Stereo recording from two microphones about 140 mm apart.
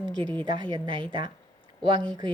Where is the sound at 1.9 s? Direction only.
30° right (ahead or behind).